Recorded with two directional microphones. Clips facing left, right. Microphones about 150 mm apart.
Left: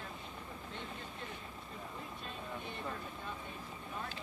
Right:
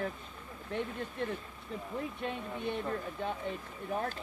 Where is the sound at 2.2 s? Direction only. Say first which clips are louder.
Right 8 dB; 70° right (ahead or behind).